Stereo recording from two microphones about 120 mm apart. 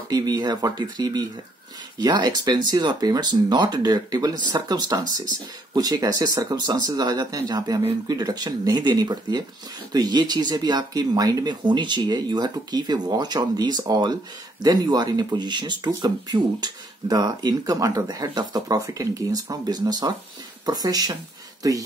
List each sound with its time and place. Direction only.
0.1 s speech: 30° right (ahead or behind)